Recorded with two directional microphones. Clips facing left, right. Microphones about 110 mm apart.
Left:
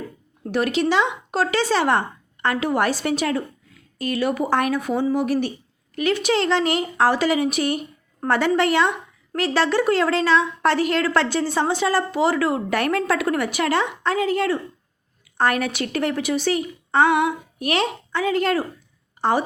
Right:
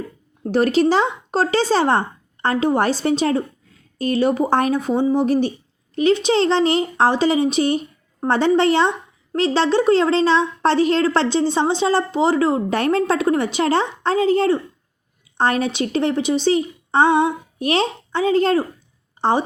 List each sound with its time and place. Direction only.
0.4 s a woman's voice: 35° right (ahead or behind)